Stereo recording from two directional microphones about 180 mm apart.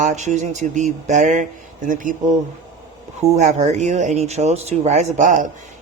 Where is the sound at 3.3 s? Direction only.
40° right (ahead or behind).